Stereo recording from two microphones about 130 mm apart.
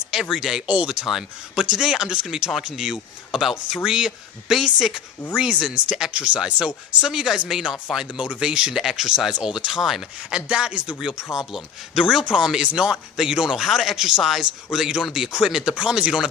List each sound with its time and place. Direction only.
0.1 s speech: 5° right (ahead or behind)